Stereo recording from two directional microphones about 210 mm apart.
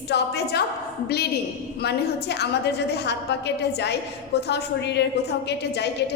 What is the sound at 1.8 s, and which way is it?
A woman's voice, 50° left (ahead or behind).